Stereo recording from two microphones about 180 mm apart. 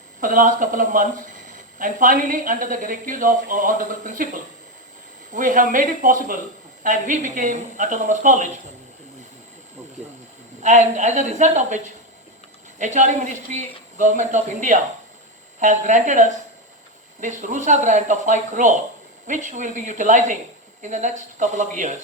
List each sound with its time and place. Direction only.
0.2 s speech: 45° right (ahead or behind)
5.3 s speech: 45° right (ahead or behind)
10.6 s a woman's voice: 40° right (ahead or behind)
12.8 s a woman's voice: 40° right (ahead or behind)